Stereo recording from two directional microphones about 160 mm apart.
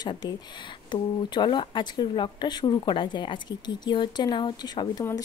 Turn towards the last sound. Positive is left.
turn(degrees=25)  # may be behind; listen again after turning